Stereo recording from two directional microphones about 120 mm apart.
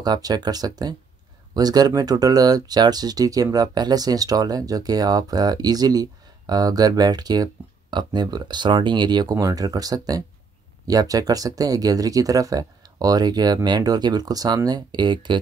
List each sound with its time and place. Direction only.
0.0 s speech: 35° right (ahead or behind)